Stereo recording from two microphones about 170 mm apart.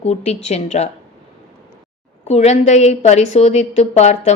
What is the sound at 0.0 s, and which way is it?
Speech, 40° left (ahead or behind).